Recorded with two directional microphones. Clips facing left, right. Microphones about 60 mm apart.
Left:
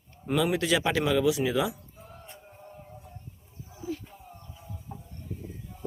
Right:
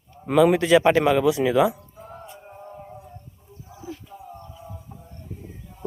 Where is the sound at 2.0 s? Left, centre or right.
Right.